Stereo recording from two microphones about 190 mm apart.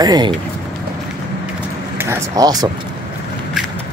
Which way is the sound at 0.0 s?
20° right (ahead or behind).